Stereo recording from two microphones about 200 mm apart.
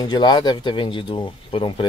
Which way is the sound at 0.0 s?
20° left (ahead or behind).